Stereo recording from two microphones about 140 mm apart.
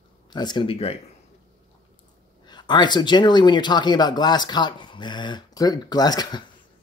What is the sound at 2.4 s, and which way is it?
Speech, 30° left (ahead or behind).